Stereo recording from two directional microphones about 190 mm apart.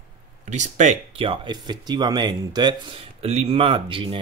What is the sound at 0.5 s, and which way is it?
Speech, 40° right (ahead or behind).